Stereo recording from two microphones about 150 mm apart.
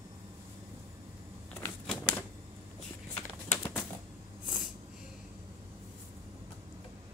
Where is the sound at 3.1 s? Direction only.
15° left (ahead or behind).